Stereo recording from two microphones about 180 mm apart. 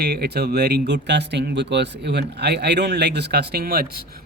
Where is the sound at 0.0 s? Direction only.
65° right (ahead or behind).